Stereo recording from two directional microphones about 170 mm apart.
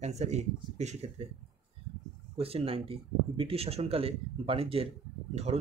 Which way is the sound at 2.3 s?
35° right (ahead or behind).